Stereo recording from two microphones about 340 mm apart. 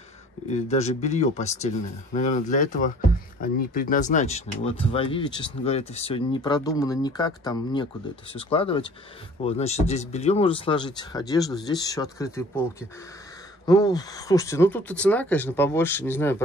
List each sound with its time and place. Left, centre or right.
0.5 s speech: centre
13.7 s speech: centre